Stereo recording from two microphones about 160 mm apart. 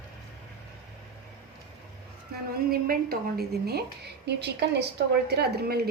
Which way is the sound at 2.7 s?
70° right (ahead or behind).